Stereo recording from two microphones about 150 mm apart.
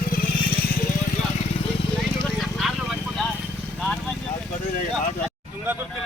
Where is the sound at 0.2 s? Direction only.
75° left (ahead or behind).